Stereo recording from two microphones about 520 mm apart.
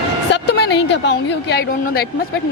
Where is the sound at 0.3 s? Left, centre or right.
Centre.